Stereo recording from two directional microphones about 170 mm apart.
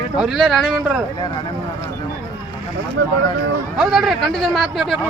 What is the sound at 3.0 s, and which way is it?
Speech, 90° right.